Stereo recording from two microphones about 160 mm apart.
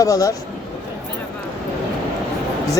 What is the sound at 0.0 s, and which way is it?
Speech, 20° left (ahead or behind).